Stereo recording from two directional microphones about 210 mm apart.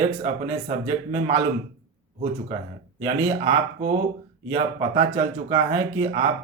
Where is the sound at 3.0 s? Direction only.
20° right (ahead or behind).